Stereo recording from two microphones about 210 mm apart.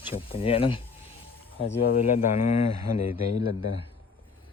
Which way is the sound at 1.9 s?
40° left (ahead or behind).